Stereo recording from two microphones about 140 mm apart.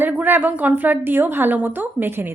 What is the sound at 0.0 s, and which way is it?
Speech, 15° right (ahead or behind).